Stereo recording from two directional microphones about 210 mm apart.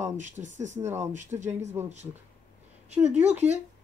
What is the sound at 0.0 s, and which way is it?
Speech, 35° right (ahead or behind).